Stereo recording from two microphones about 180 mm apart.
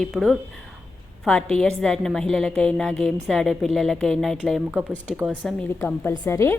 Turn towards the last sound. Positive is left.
turn(degrees=15)  # may be behind; listen again after turning